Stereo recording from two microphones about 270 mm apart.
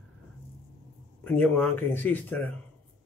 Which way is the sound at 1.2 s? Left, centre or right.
Centre.